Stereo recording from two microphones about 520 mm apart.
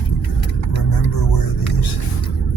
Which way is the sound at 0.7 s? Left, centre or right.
Left.